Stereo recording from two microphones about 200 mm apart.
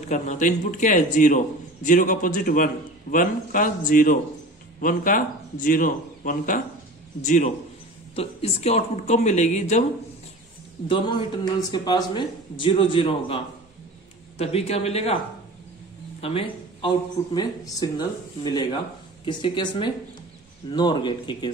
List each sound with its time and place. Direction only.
0.1 s a man's voice: 35° left (ahead or behind)
10.9 s speech: 25° left (ahead or behind)
14.4 s a man's voice: 30° left (ahead or behind)
16.2 s speech: 30° left (ahead or behind)